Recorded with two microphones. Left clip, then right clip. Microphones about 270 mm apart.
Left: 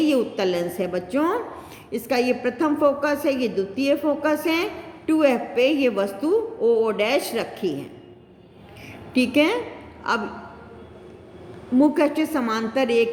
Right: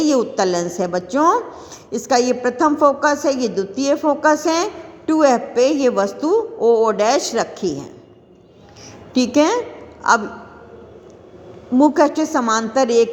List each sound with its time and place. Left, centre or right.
0.0 s a woman's voice: right
9.1 s a woman's voice: right
11.8 s a woman's voice: centre